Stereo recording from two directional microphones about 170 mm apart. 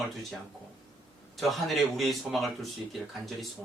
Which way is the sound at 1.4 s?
Centre (ahead or behind).